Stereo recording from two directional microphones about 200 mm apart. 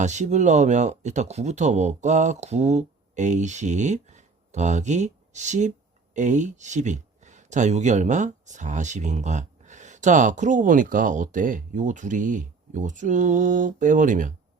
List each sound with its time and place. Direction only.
0.0 s speech: 35° right (ahead or behind)